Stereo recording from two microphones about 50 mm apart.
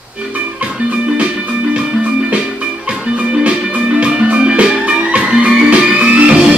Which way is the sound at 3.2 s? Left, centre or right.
Right.